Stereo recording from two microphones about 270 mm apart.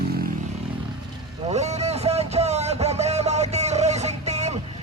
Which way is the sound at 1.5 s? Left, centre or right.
Right.